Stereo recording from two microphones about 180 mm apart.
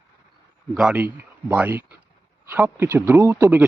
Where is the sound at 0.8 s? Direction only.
5° right (ahead or behind).